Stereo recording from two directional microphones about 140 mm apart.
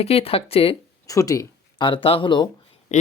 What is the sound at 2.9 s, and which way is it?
Speech, 55° left (ahead or behind).